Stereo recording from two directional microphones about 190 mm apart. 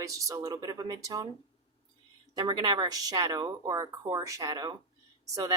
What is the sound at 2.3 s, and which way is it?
Speech, 20° right (ahead or behind).